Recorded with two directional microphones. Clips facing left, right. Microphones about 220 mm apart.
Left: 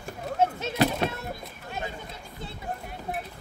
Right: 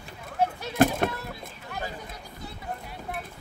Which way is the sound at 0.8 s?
50° right (ahead or behind).